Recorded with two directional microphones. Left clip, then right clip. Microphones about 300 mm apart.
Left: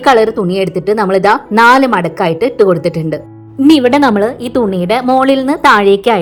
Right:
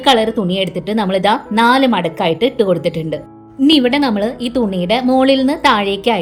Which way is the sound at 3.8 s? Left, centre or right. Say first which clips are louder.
Left 6 dB; left.